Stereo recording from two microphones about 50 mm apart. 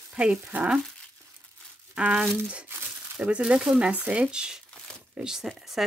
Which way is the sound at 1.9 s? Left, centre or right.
Right.